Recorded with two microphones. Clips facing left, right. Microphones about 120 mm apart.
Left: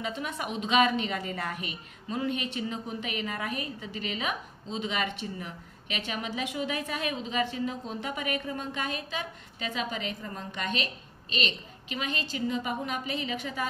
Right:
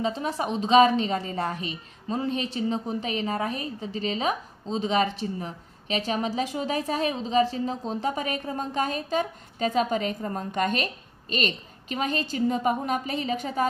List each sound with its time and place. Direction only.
0.0 s a woman's voice: 35° right (ahead or behind)